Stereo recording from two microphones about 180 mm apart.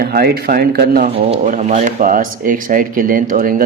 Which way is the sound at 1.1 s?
35° right (ahead or behind).